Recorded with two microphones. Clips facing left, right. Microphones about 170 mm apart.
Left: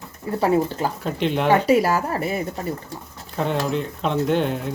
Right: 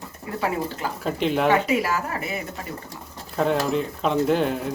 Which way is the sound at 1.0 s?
Centre (ahead or behind).